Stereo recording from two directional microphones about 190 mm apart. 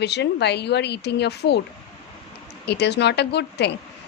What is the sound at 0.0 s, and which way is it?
Speech, 60° left (ahead or behind).